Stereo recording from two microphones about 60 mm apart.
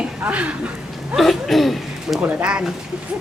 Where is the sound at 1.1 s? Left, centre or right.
Centre.